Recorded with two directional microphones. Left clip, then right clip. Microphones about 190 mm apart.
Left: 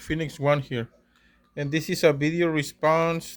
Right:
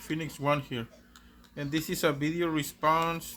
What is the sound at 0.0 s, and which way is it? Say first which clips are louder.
Speech: left 6 dB; 40° left (ahead or behind).